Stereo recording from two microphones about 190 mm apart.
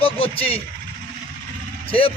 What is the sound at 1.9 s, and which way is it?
Speech, 30° left (ahead or behind).